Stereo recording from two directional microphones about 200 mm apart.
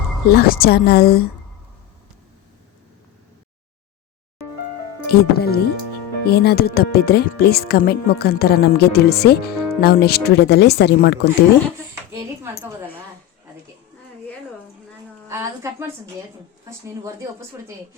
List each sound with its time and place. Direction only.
0.3 s speech: 50° left (ahead or behind)
5.0 s speech: 50° left (ahead or behind)
12.1 s speech: 15° right (ahead or behind)
15.3 s speech: 10° right (ahead or behind)